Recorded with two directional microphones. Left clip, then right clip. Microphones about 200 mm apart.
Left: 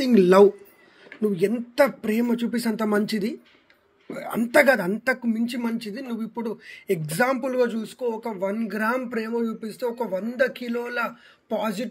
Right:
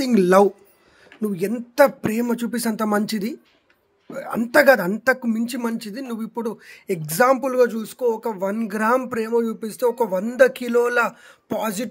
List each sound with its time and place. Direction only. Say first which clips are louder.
0.0 s speech: even; 25° right (ahead or behind)